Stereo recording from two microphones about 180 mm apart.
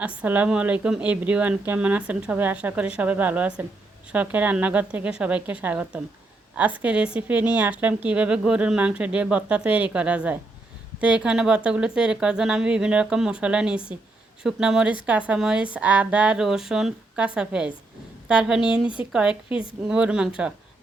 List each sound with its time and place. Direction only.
0.2 s a woman's voice: 10° right (ahead or behind)